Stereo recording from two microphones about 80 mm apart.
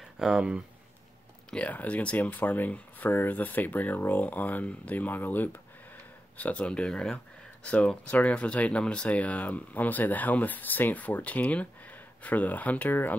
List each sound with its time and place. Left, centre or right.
0.2 s speech: centre
1.5 s speech: centre